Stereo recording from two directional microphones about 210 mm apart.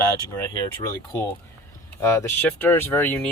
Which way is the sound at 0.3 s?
15° left (ahead or behind).